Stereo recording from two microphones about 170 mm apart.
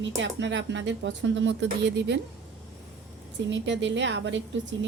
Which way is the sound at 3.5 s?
90° right.